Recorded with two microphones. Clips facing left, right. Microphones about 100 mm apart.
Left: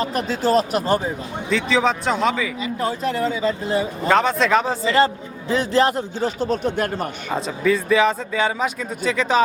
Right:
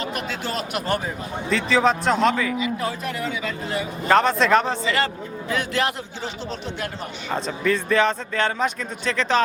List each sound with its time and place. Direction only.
0.0 s a man's voice: 35° left (ahead or behind)
1.5 s speech: centre (ahead or behind)
2.6 s a man's voice: 35° left (ahead or behind)
4.1 s speech: centre (ahead or behind)
4.8 s a man's voice: 30° left (ahead or behind); by 7.1 s 50° left (ahead or behind)
7.3 s speech: 5° left (ahead or behind)